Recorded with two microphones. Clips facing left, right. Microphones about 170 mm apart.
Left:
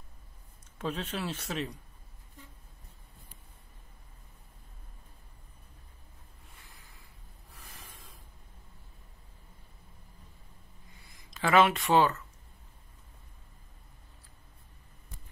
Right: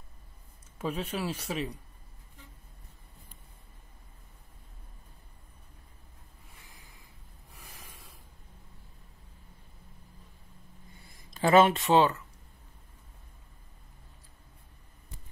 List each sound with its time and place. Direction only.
0.7 s a man's voice: 10° right (ahead or behind)
7.5 s snort: 10° right (ahead or behind)
11.4 s speech: 25° right (ahead or behind)